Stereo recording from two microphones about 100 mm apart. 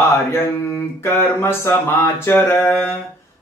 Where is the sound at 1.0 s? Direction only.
25° left (ahead or behind).